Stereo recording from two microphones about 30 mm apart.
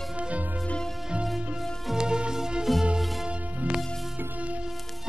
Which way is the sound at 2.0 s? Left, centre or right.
Right.